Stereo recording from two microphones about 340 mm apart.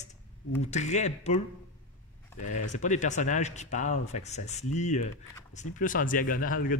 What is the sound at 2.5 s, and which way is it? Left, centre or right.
Speech, left.